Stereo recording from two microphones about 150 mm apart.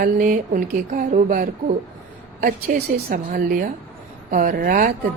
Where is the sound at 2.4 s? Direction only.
90° right.